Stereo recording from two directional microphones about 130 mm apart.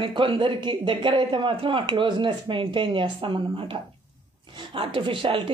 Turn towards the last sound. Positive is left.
turn(degrees=-40)  # may be behind; listen again after turning